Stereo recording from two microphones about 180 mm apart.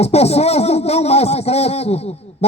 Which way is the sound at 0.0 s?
35° left (ahead or behind).